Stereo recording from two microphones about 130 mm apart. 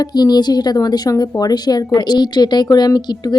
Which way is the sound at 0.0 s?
30° left (ahead or behind).